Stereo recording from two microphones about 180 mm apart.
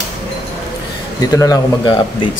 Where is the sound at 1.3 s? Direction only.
20° left (ahead or behind).